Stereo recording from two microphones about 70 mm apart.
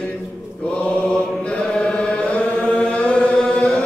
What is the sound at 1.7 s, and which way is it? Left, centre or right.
Chant, centre.